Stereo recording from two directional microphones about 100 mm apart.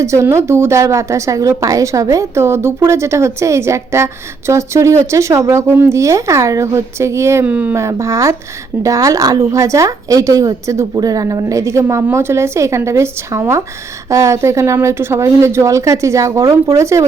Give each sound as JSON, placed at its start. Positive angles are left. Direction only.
{"t": 0.0, "sound": "a woman's voice", "side_deg": -30}
{"t": 7.4, "sound": "speech", "side_deg": -15}
{"t": 7.7, "sound": "a woman's voice", "side_deg": -30}